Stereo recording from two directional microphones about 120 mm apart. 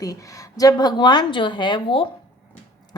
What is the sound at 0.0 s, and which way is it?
A woman's voice, 30° left (ahead or behind).